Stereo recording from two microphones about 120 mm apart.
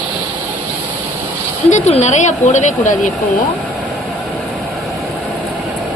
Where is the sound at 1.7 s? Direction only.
75° left (ahead or behind); by 3.1 s 90° left.